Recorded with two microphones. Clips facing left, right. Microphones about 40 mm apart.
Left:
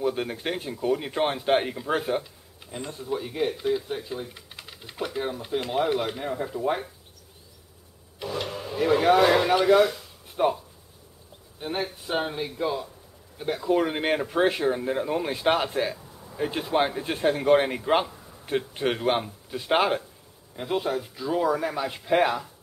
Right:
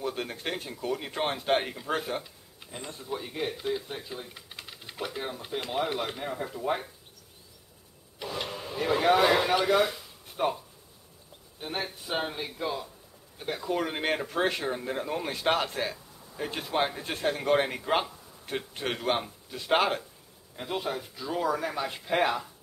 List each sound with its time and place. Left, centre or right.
0.0 s speech: centre
8.2 s speech: centre
11.6 s speech: centre
18.1 s a sound: centre
18.5 s speech: centre